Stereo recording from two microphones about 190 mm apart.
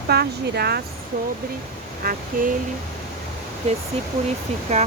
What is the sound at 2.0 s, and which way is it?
Speech, 50° right (ahead or behind).